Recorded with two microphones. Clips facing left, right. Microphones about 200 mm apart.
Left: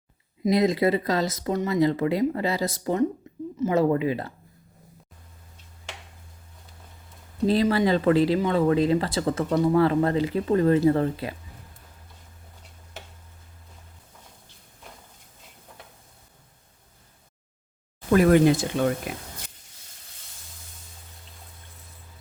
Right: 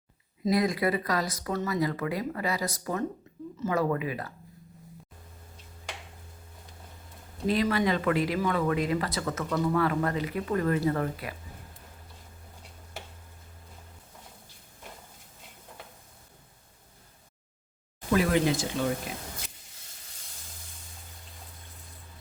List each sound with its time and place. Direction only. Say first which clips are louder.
0.4 s speech: left 5 dB; 25° left (ahead or behind)
7.4 s speech: left 5 dB; 30° left (ahead or behind)
18.1 s speech: left 7 dB; 50° left (ahead or behind)